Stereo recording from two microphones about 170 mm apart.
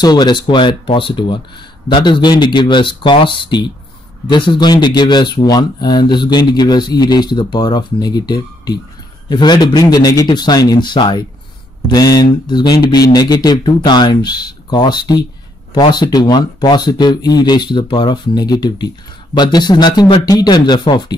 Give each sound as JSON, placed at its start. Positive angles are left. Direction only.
{"t": 0.0, "sound": "speech", "side_deg": 25}